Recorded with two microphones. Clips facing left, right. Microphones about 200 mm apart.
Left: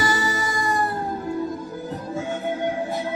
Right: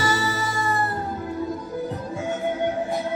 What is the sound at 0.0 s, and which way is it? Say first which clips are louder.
Music: even; 15° left (ahead or behind).